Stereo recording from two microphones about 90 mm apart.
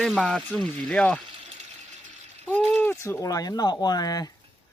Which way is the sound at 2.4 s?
20° left (ahead or behind).